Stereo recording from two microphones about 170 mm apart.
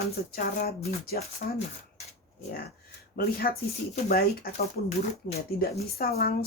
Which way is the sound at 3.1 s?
60° left (ahead or behind).